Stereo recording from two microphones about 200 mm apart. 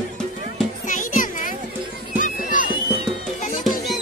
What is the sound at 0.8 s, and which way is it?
Music, 40° left (ahead or behind).